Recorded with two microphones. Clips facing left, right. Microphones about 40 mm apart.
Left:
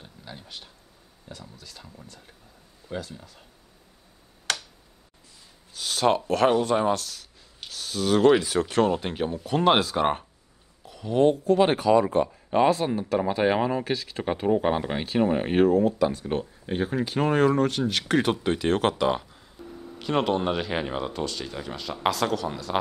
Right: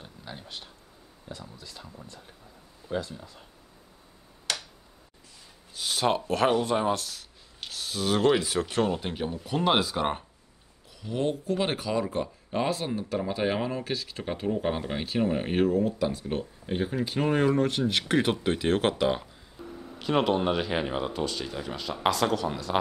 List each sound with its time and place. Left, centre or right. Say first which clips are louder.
0.0 s a sound: right 1 dB; centre
1.3 s speech: right 1 dB; centre
4.5 s tick-tock: left 3 dB; left
5.8 s speech: left 3 dB; centre
7.6 s a sound: left 2 dB; centre
8.2 s speech: left 5 dB; centre
10.9 s speech: left 8 dB; left
16.0 s speech: left 5 dB; centre
16.3 s speech: left 3 dB; centre
17.1 s speech: left 3 dB; centre